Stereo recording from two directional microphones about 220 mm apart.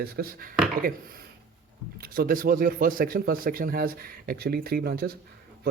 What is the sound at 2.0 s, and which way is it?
Speech, 40° right (ahead or behind).